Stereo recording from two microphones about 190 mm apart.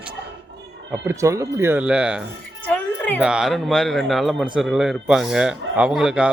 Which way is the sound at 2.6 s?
10° left (ahead or behind).